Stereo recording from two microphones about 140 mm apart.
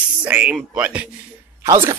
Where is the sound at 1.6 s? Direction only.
20° right (ahead or behind).